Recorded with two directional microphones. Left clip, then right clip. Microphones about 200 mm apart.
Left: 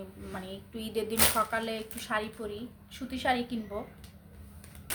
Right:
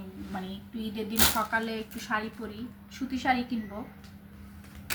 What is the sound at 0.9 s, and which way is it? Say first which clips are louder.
Speech: right 1 dB; 50° left (ahead or behind).